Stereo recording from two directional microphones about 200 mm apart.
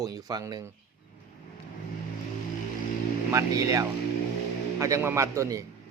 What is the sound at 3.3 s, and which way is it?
Speech, 15° right (ahead or behind).